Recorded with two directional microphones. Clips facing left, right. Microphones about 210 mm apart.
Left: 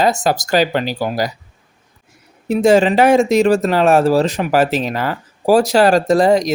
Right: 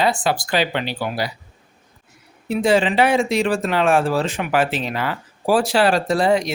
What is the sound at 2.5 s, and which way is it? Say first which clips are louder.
Speech: left 6 dB; 45° left (ahead or behind).